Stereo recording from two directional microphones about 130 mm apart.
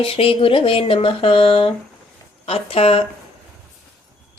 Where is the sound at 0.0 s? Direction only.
45° left (ahead or behind).